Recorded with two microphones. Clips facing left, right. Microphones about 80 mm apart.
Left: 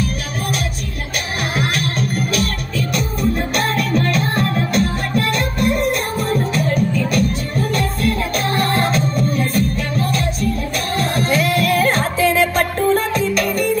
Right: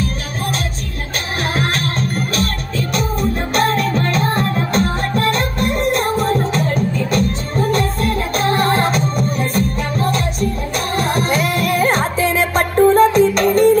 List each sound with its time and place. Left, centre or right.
1.6 s music: right